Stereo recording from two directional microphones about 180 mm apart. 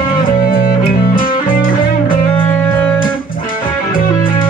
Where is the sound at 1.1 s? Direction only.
50° left (ahead or behind).